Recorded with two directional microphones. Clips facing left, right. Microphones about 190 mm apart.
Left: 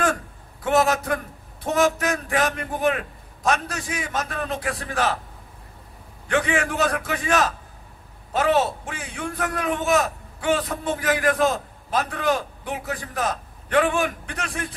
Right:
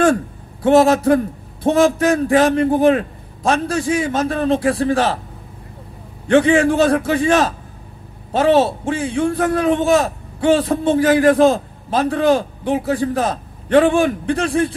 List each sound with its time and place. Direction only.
0.0 s a man's voice: 30° right (ahead or behind)
6.2 s a man's voice: 30° right (ahead or behind)